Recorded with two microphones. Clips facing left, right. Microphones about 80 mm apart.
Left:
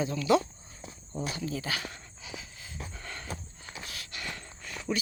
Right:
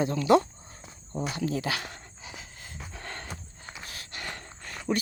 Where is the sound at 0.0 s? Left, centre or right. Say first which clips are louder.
Right 4 dB; right.